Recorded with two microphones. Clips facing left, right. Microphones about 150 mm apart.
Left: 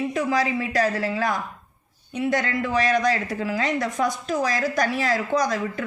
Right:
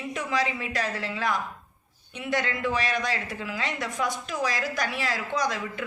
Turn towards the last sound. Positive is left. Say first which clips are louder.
# left 5 dB
turn(degrees=40)  # may be behind; listen again after turning